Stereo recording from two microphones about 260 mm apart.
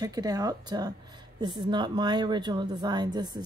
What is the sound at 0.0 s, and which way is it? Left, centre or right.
Speech, centre.